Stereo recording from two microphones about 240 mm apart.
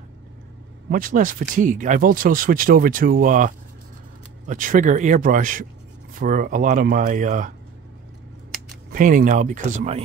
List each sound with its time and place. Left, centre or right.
0.8 s speech: right
8.9 s speech: right